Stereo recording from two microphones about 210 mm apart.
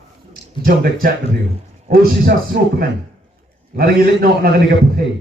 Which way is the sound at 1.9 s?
45° right (ahead or behind).